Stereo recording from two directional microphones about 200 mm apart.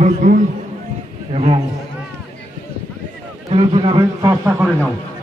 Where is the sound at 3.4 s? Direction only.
30° right (ahead or behind).